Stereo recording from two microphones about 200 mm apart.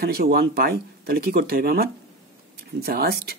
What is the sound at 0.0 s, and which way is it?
Speech, 50° right (ahead or behind).